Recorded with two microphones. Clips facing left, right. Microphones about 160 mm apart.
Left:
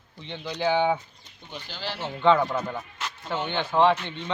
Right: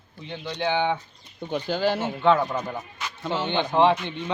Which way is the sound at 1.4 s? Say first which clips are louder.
Right 13 dB; 55° right (ahead or behind).